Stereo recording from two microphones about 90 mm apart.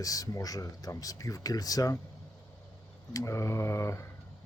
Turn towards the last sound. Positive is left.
turn(degrees=35)  # may be behind; listen again after turning